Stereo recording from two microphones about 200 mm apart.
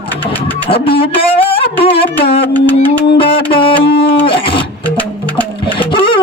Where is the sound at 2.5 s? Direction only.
10° left (ahead or behind).